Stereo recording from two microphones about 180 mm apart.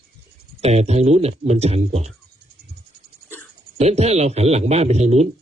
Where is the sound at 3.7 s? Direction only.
35° right (ahead or behind).